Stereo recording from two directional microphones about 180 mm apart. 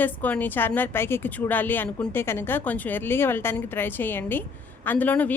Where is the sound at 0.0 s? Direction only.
10° left (ahead or behind).